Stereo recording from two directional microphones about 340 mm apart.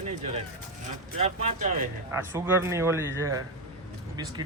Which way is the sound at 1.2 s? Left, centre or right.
Right.